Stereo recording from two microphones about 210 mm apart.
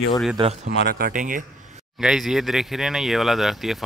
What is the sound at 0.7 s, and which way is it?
Speech, 50° right (ahead or behind).